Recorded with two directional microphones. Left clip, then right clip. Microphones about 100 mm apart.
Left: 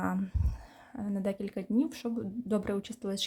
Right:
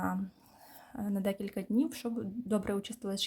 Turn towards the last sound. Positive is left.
turn(degrees=10)  # may be behind; listen again after turning